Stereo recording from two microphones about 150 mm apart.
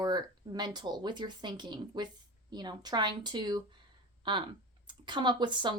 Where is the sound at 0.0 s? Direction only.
30° right (ahead or behind).